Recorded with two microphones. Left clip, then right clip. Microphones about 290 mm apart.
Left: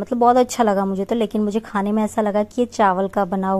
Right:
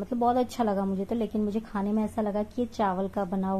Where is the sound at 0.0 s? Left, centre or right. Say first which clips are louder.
Left 11 dB; left.